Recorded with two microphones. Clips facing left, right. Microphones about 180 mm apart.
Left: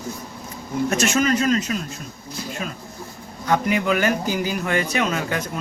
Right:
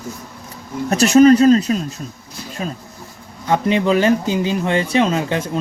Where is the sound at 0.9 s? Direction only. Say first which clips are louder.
Right 12 dB; 35° right (ahead or behind).